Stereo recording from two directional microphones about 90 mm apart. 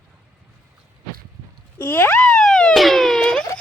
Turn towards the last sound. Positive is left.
turn(degrees=5)  # may be behind; listen again after turning